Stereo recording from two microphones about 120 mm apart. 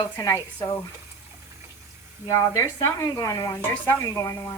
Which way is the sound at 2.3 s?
25° left (ahead or behind).